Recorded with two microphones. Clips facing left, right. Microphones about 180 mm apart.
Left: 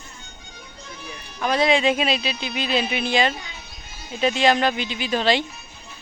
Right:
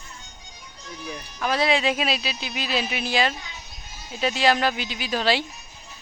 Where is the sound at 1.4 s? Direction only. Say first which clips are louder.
Left 3 dB; centre (ahead or behind).